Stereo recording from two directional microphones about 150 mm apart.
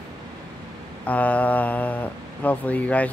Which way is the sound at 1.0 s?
10° left (ahead or behind).